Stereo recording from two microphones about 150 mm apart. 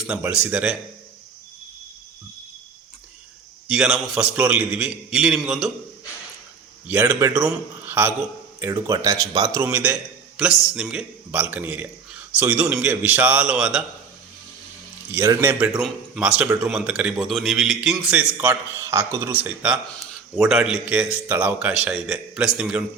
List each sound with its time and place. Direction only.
0.1 s speech: 10° right (ahead or behind)
3.7 s a man's voice: 5° right (ahead or behind)
6.8 s a man's voice: 10° right (ahead or behind)
15.1 s speech: 15° right (ahead or behind)
15.8 s a man's voice: 5° right (ahead or behind)